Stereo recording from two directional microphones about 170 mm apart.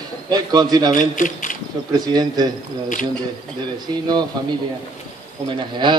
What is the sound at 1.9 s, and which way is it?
Speech, 25° right (ahead or behind).